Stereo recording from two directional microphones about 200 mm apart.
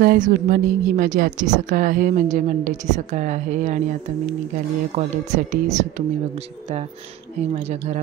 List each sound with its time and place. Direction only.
0.0 s speech: 45° right (ahead or behind)
4.9 s speech: 35° right (ahead or behind)